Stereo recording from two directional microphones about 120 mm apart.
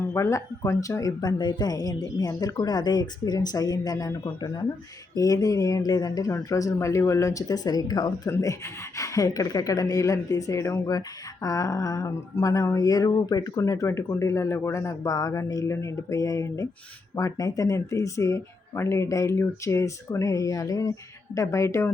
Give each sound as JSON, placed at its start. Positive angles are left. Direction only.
{"t": 0.0, "sound": "speech", "side_deg": 25}
{"t": 8.3, "sound": "speech", "side_deg": 25}